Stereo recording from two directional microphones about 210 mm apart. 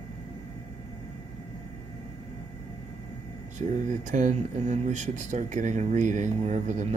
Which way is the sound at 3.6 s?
35° right (ahead or behind).